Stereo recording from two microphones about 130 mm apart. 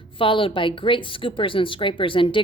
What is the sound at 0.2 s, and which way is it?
A woman's voice, 40° left (ahead or behind).